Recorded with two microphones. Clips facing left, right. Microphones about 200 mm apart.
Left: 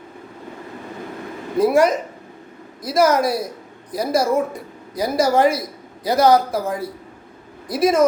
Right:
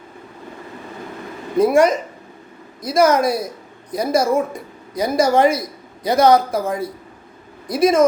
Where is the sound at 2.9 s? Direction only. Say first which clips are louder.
Right 1 dB; centre (ahead or behind).